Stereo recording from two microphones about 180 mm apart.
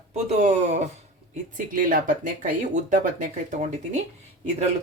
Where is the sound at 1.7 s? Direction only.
50° right (ahead or behind).